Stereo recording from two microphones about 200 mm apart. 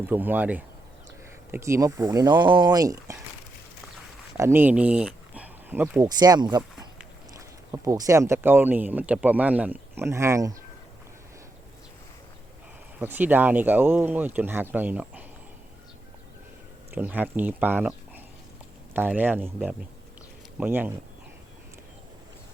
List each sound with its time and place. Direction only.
0.0 s speech: 10° right (ahead or behind)
4.4 s speech: 10° right (ahead or behind)
6.6 s speech: 10° right (ahead or behind)
13.0 s speech: 10° right (ahead or behind)
16.9 s speech: 10° right (ahead or behind)
18.9 s speech: 10° right (ahead or behind)